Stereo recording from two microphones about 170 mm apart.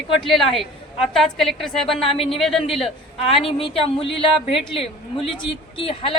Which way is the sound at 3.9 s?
35° left (ahead or behind).